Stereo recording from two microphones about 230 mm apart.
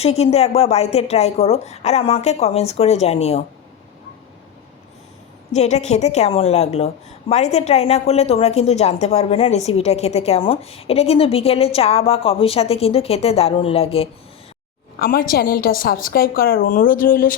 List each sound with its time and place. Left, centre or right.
0.0 s a woman's voice: left
5.5 s a woman's voice: left
14.9 s a woman's voice: left